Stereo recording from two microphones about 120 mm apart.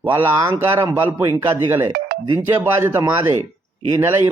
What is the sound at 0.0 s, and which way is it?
A man's voice, 20° right (ahead or behind).